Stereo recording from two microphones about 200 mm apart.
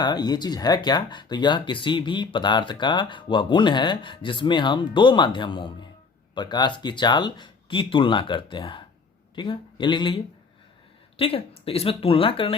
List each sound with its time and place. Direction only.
0.0 s speech: 20° left (ahead or behind)
11.2 s speech: 30° left (ahead or behind)